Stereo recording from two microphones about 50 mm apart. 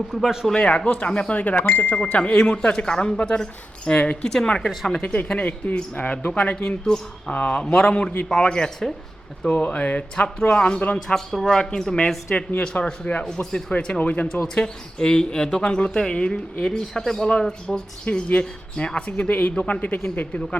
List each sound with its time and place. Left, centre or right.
0.4 s speech: centre
4.6 s speech: centre
5.0 s speech: left
9.5 s speech: left
11.1 s speech: centre; by 13.2 s left
13.2 s speech: centre; by 14.3 s left
14.5 s speech: centre